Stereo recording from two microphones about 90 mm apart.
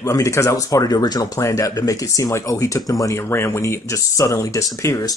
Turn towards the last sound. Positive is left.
turn(degrees=35)  # may be behind; listen again after turning